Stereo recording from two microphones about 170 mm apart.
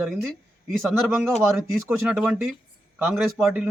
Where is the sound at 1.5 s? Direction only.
10° right (ahead or behind).